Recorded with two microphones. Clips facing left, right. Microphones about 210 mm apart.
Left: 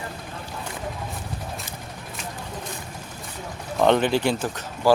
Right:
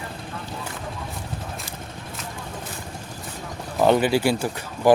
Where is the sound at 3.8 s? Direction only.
5° right (ahead or behind).